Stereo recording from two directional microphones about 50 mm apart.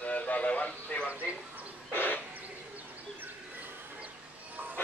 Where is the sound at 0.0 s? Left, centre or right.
Left.